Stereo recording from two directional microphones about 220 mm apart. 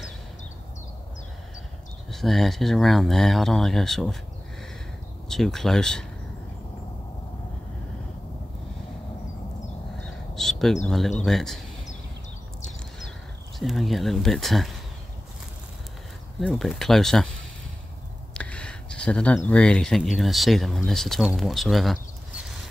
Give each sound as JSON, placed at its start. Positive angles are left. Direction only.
{"t": 2.0, "sound": "speech", "side_deg": 0}
{"t": 5.3, "sound": "speech", "side_deg": 0}
{"t": 10.0, "sound": "a sound", "side_deg": 0}
{"t": 10.9, "sound": "speech", "side_deg": 0}
{"t": 13.6, "sound": "speech", "side_deg": 0}
{"t": 16.3, "sound": "speech", "side_deg": 0}
{"t": 18.3, "sound": "speech", "side_deg": 5}